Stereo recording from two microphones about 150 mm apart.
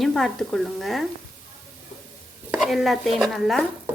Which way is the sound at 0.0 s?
Centre (ahead or behind).